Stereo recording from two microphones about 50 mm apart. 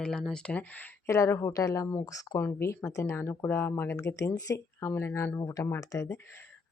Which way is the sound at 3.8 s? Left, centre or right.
Left.